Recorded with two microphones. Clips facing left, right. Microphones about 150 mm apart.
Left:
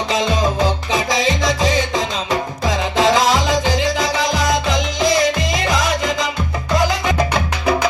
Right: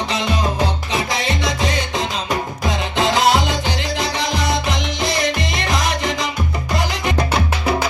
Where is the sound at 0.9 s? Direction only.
90° left.